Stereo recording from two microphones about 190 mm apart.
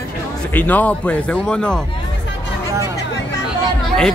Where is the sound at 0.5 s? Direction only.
10° left (ahead or behind).